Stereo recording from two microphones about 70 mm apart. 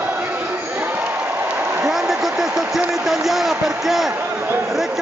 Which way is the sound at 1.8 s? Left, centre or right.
Centre.